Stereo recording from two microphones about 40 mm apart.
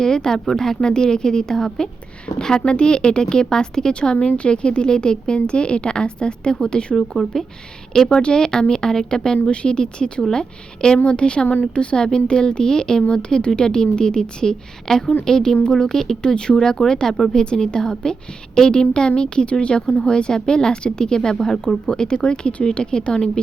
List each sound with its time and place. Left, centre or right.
0.0 s a woman's voice: centre
6.9 s a woman's voice: centre
11.4 s a woman's voice: left
11.7 s a woman's voice: left